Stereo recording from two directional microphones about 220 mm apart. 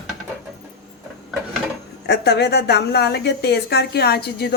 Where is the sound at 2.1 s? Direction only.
50° left (ahead or behind).